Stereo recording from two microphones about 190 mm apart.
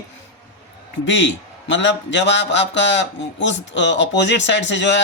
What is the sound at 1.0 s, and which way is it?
A man's voice, 75° left (ahead or behind).